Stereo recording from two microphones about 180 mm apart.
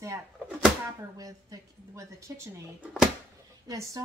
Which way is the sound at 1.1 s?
20° right (ahead or behind).